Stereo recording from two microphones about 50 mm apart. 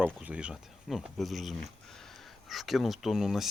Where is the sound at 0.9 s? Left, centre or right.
Centre.